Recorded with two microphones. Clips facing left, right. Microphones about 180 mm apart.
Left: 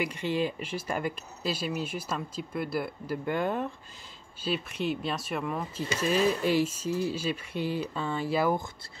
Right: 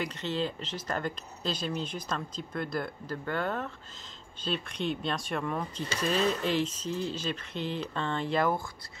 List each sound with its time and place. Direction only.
0.0 s speech: 10° left (ahead or behind)